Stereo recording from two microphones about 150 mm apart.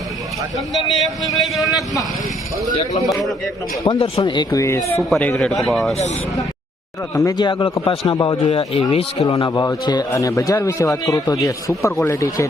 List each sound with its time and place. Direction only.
0.7 s speech: centre (ahead or behind)
2.7 s a man's voice: 25° left (ahead or behind)
5.0 s speech: centre (ahead or behind)
7.1 s a man's voice: 20° left (ahead or behind)
8.1 s a man's voice: 25° left (ahead or behind)
8.4 s a man's voice: 35° left (ahead or behind)
9.5 s a man's voice: 25° left (ahead or behind)